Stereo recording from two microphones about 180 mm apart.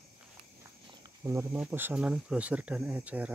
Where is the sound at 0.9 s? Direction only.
20° right (ahead or behind).